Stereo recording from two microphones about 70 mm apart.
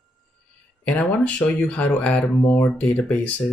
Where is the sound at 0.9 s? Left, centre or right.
Centre.